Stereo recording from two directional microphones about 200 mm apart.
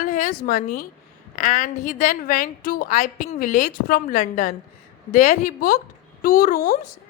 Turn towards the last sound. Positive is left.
turn(degrees=45)  # may be behind; listen again after turning